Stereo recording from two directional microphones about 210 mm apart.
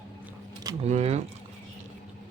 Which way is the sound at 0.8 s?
30° right (ahead or behind).